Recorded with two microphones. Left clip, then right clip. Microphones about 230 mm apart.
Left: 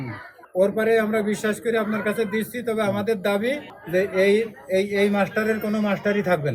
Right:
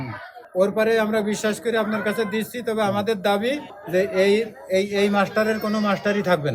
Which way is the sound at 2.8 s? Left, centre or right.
Right.